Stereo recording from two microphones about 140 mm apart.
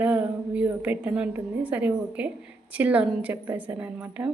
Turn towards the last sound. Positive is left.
turn(degrees=-10)  # may be behind; listen again after turning